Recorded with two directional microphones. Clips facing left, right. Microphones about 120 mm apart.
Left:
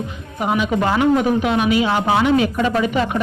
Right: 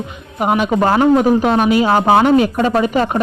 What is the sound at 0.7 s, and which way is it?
A man's voice, 40° right (ahead or behind).